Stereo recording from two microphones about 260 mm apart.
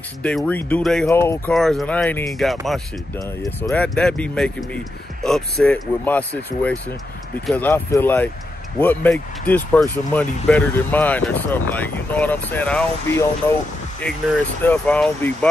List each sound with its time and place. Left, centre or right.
0.2 s speech: centre